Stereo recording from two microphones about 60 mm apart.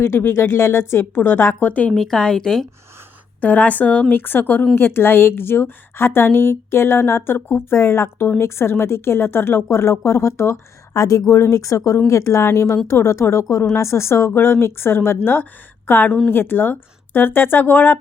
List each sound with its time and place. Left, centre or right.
0.2 s a woman's voice: left
2.0 s a woman's voice: centre
3.4 s a woman's voice: left
10.9 s speech: left
11.3 s a woman's voice: left